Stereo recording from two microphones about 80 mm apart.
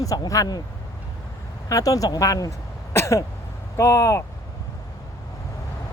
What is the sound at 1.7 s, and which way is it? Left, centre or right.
Speech, left.